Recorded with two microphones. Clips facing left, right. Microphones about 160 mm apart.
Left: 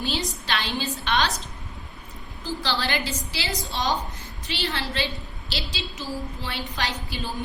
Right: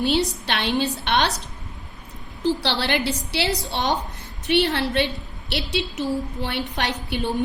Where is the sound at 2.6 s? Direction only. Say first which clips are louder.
Right 4 dB; 65° right (ahead or behind).